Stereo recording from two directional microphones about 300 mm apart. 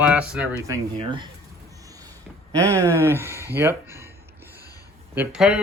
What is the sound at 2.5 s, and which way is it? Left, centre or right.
Speech, centre.